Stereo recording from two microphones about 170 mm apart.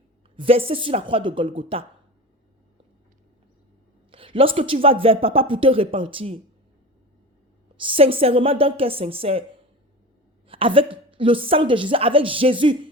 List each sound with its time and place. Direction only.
0.3 s speech: 35° right (ahead or behind)
4.1 s speech: 30° right (ahead or behind)
7.8 s speech: 30° right (ahead or behind)
10.5 s speech: 30° right (ahead or behind)